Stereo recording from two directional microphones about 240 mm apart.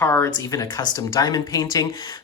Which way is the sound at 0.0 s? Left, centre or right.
Centre.